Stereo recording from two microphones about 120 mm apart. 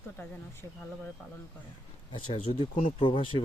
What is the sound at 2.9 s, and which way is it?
Speech, 45° left (ahead or behind).